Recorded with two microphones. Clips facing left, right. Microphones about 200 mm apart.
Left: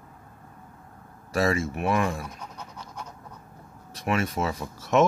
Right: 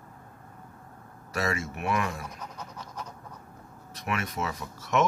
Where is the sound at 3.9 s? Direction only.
30° left (ahead or behind).